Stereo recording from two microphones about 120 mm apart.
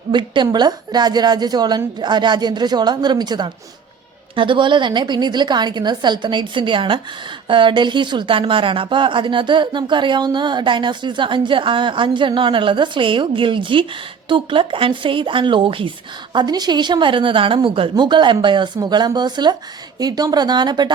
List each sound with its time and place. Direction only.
0.1 s a woman's voice: 40° right (ahead or behind)
16.3 s a woman's voice: 35° right (ahead or behind)